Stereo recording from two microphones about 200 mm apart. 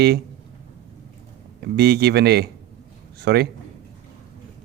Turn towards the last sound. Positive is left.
turn(degrees=-55)  # may be behind; listen again after turning